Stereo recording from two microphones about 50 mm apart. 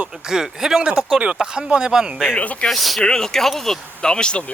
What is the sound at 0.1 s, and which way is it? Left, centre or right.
Speech, centre.